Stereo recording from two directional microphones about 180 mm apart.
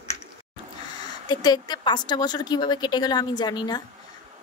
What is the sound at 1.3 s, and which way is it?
A woman's voice, 25° left (ahead or behind).